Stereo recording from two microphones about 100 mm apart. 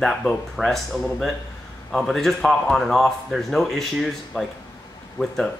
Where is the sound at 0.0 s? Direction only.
5° left (ahead or behind).